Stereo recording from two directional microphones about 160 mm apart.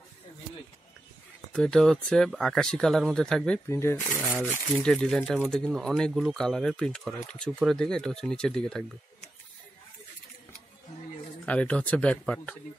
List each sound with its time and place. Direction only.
1.5 s speech: 5° left (ahead or behind)
3.6 s speech: 15° left (ahead or behind)
11.4 s speech: 10° left (ahead or behind)